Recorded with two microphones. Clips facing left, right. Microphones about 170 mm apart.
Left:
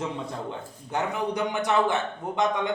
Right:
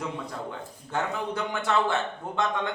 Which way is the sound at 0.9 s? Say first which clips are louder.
Left 2 dB; 15° left (ahead or behind).